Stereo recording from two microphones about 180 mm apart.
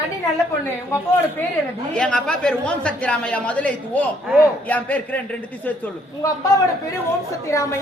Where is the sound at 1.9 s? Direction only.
5° left (ahead or behind).